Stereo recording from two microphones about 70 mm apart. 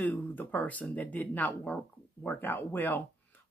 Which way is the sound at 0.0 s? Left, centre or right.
Left.